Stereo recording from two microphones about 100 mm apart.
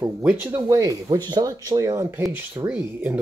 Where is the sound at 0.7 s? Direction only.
30° right (ahead or behind).